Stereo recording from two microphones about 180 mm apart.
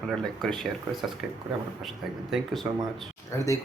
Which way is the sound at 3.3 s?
15° left (ahead or behind).